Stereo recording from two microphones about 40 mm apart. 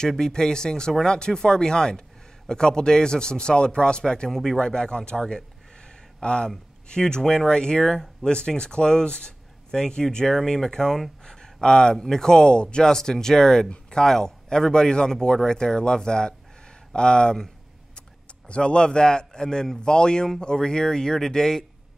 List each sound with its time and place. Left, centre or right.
0.2 s speech: centre
4.3 s speech: centre
4.6 s speech: centre
7.8 s speech: centre
8.3 s speech: left
18.5 s speech: left; by 21.6 s centre